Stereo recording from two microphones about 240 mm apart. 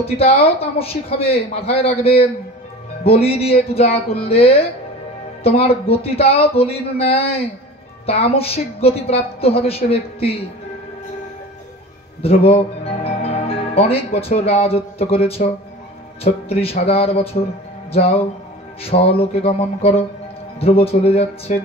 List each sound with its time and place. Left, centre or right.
0.0 s a woman's voice: left
12.2 s a woman's voice: left
18.8 s a woman's voice: left